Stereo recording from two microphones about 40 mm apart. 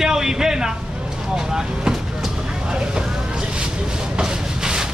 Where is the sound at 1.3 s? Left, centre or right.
Centre.